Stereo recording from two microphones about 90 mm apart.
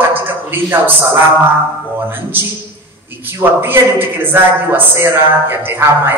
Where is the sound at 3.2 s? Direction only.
25° right (ahead or behind).